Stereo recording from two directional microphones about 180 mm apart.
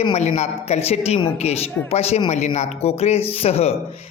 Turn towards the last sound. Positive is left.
turn(degrees=35)  # may be behind; listen again after turning